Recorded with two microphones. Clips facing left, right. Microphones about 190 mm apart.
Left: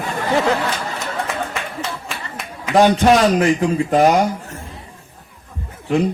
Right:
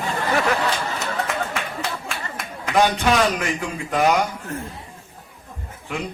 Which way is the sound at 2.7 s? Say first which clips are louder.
Left 6 dB; 40° left (ahead or behind).